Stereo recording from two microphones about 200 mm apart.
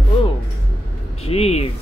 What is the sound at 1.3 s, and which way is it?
Speech, 30° left (ahead or behind).